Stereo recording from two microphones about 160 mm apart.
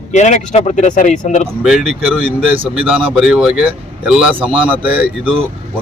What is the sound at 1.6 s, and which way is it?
Speech, centre (ahead or behind).